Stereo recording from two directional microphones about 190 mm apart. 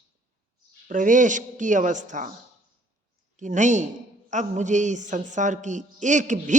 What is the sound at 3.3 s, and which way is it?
Speech, 40° right (ahead or behind).